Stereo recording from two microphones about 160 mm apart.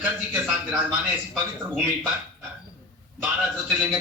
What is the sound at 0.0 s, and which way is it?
A man's voice, 10° right (ahead or behind).